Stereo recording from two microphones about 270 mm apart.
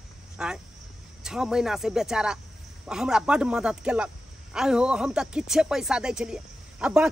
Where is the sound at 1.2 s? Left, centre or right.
Centre.